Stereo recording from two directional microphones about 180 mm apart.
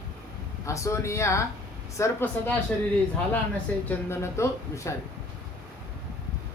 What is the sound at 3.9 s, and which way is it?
Speech, 15° left (ahead or behind).